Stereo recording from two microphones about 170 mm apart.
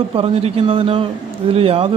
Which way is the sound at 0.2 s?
35° right (ahead or behind).